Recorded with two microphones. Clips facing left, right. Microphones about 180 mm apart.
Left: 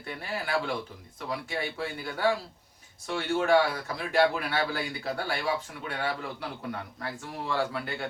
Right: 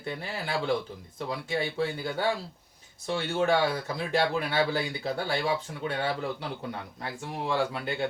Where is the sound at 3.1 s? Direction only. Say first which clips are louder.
Left 1 dB; 25° right (ahead or behind).